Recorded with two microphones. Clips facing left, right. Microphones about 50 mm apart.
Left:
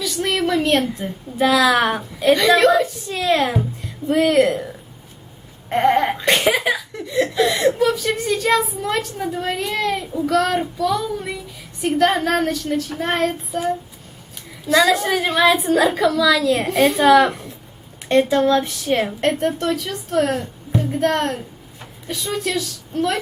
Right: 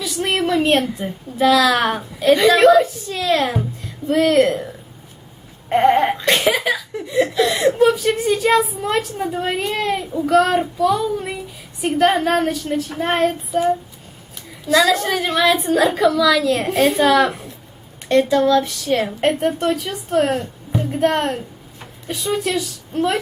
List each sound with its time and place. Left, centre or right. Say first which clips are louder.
0.0 s a sound: even; centre
1.4 s a woman's voice: right 1 dB; centre
1.7 s a woman's voice: left 1 dB; centre
2.6 s child singing: right 3 dB; centre
3.1 s a woman's voice: even; centre
3.4 s a woman's voice: even; centre
5.6 s a sound: right 2 dB; centre
6.1 s a woman's voice: even; centre
6.9 s child singing: right 2 dB; centre
14.7 s a woman's voice: even; centre
18.3 s a sound: right 1 dB; left
19.3 s a woman's voice: right 2 dB; centre